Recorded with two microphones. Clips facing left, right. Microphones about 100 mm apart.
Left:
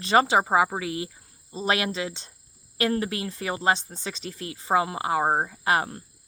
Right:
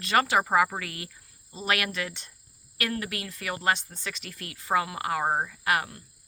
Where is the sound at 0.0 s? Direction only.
25° left (ahead or behind).